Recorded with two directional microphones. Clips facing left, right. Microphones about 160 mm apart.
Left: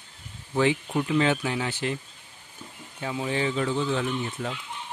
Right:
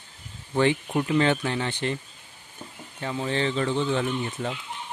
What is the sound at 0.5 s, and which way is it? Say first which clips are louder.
Speech: right 1 dB; centre (ahead or behind).